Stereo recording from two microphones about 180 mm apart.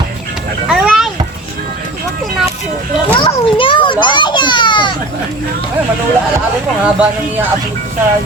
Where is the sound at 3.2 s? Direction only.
30° left (ahead or behind).